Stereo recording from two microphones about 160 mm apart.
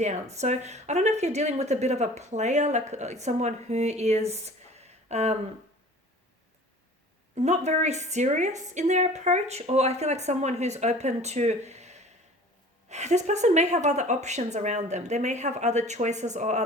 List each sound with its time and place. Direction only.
0.0 s speech: 45° right (ahead or behind)
7.3 s speech: 45° right (ahead or behind)